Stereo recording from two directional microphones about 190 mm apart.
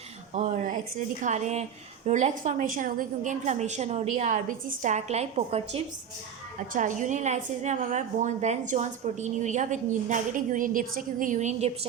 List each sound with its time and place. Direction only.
0.3 s a woman's voice: 40° right (ahead or behind)